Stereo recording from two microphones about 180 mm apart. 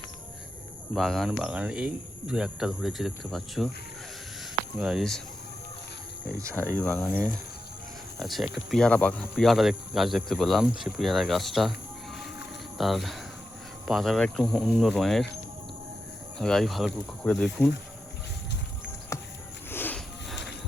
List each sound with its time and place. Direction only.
0.9 s speech: centre (ahead or behind)
4.8 s speech: centre (ahead or behind)
6.7 s speech: 10° left (ahead or behind)
8.2 s speech: centre (ahead or behind)
12.7 s speech: centre (ahead or behind)
16.4 s speech: centre (ahead or behind)
19.1 s music: 15° left (ahead or behind)
19.7 s a sound: 10° left (ahead or behind)